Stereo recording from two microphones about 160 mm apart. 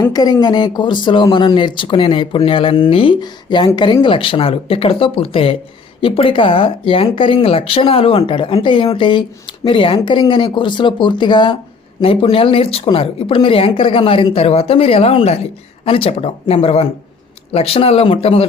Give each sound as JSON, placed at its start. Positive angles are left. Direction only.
{"t": 0.0, "sound": "speech", "side_deg": 25}